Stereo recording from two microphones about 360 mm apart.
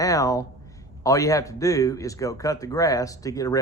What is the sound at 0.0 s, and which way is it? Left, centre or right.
A man's voice, centre.